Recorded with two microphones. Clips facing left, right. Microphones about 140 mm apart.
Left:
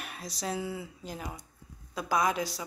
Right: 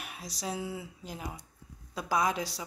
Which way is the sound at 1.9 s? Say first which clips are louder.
Left 1 dB; 30° right (ahead or behind).